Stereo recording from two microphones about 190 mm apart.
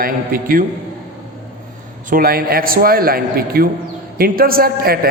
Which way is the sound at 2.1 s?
50° right (ahead or behind).